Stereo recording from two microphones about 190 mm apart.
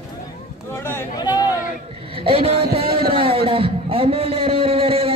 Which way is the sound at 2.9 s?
55° right (ahead or behind).